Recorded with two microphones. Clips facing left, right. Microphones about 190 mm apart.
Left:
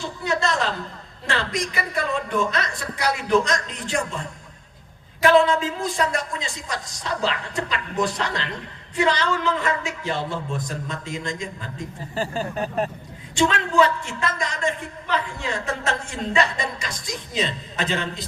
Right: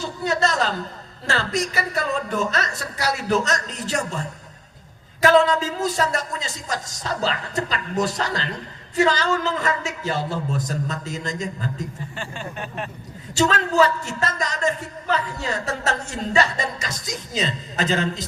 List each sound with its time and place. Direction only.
0.3 s a sound: 40° right (ahead or behind)
1.3 s a man's voice: 40° right (ahead or behind)
12.1 s speech: 35° left (ahead or behind)
13.3 s a man's voice: 40° right (ahead or behind)